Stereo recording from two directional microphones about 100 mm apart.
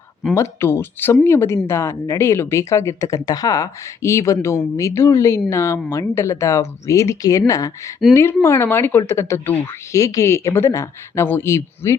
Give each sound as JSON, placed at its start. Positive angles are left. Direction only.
{"t": 0.3, "sound": "speech", "side_deg": 25}